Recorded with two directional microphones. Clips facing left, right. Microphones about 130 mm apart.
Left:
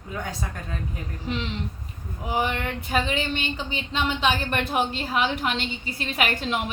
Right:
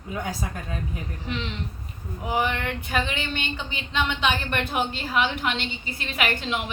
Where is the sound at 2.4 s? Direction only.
35° left (ahead or behind).